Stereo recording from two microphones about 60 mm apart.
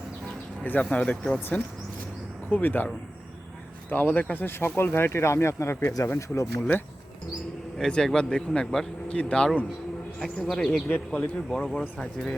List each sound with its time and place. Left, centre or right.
0.6 s speech: left
0.9 s speech: centre
2.5 s speech: left
4.8 s speech: left
5.8 s speech: left
6.1 s speech: left
6.6 s speech: left
7.8 s speech: centre